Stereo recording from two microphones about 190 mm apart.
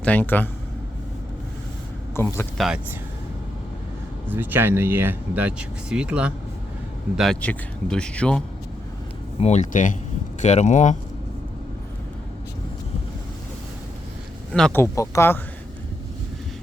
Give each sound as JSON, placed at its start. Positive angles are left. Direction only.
{"t": 0.0, "sound": "speech", "side_deg": 10}
{"t": 2.1, "sound": "speech", "side_deg": 10}
{"t": 2.6, "sound": "speech", "side_deg": -5}
{"t": 4.3, "sound": "speech", "side_deg": -10}
{"t": 9.4, "sound": "speech", "side_deg": 35}
{"t": 14.5, "sound": "speech", "side_deg": 5}